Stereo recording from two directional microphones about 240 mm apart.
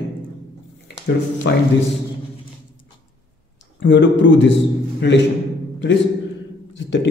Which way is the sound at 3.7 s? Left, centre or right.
Left.